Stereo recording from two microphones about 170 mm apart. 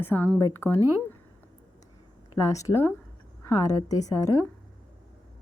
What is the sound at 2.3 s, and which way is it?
A woman's voice, 20° left (ahead or behind).